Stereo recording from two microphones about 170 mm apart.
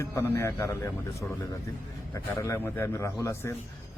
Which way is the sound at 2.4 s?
15° left (ahead or behind).